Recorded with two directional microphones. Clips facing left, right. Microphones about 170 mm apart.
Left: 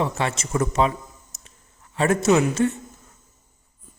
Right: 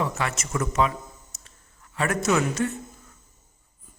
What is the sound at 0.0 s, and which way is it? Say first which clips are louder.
A man's voice: left 3 dB; 25° left (ahead or behind).